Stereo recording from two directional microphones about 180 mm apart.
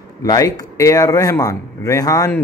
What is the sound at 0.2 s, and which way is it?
A man's voice, 20° left (ahead or behind).